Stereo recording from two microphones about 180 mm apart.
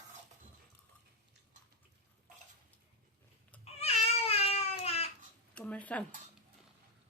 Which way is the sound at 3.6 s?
35° left (ahead or behind).